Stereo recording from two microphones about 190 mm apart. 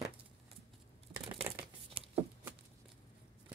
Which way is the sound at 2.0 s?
30° right (ahead or behind).